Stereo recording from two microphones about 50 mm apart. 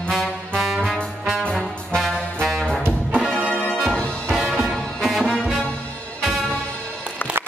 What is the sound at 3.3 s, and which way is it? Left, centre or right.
Music, right.